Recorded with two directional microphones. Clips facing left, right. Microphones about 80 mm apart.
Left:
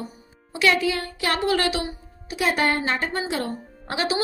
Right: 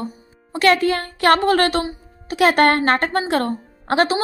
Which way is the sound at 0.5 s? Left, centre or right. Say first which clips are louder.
Right 5 dB; right.